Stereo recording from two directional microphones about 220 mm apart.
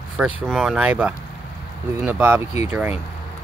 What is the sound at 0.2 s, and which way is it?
Speech, 5° right (ahead or behind).